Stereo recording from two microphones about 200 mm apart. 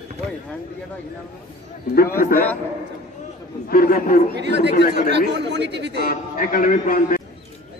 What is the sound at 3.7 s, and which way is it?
Speech, 50° left (ahead or behind).